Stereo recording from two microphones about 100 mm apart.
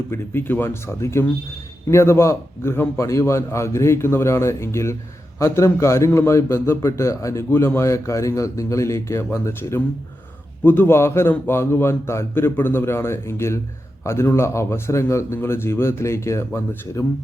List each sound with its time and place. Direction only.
0.1 s a man's voice: 20° left (ahead or behind)